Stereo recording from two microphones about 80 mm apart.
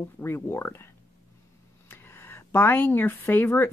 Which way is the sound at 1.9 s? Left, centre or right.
Left.